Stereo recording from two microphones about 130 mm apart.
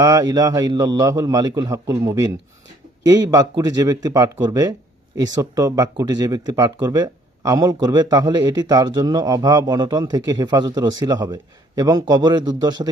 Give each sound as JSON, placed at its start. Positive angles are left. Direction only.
{"t": 0.0, "sound": "a man's voice", "side_deg": -30}